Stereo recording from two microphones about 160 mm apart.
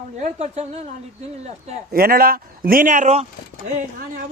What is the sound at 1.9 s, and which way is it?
Speech, 65° right (ahead or behind).